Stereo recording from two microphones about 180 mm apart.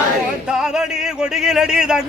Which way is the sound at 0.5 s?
5° right (ahead or behind).